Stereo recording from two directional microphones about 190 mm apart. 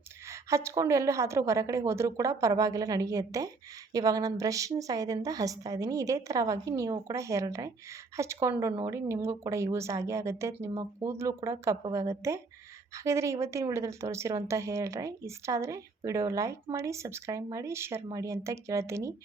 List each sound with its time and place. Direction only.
0.3 s speech: 15° right (ahead or behind)